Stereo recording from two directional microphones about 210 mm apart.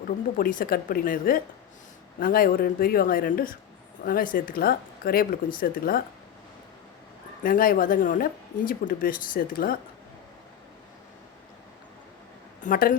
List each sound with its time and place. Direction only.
0.3 s speech: 45° left (ahead or behind)
7.4 s speech: 40° left (ahead or behind)
12.6 s speech: 40° left (ahead or behind)